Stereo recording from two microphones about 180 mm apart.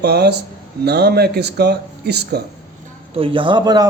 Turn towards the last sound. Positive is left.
turn(degrees=-20)  # may be behind; listen again after turning